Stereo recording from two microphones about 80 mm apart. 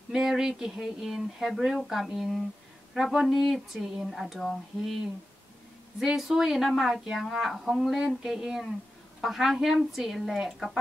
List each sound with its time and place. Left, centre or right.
0.1 s speech: centre
5.9 s speech: centre